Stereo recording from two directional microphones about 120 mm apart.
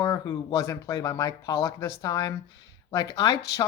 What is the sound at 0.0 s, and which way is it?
Speech, 35° left (ahead or behind).